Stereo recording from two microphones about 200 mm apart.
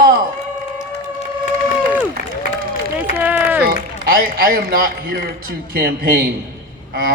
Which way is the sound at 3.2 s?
10° right (ahead or behind).